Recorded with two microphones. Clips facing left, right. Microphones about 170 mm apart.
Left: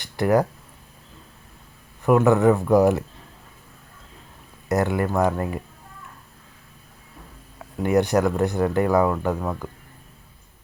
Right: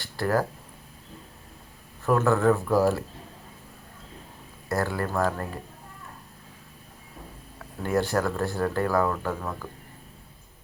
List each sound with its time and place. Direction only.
0.0 s a sound: 20° left (ahead or behind)
2.0 s speech: 15° left (ahead or behind)
4.7 s speech: 20° left (ahead or behind)
7.8 s speech: 20° left (ahead or behind)